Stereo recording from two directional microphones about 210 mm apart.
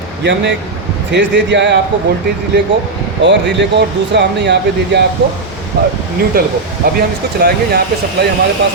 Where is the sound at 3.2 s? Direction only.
55° right (ahead or behind).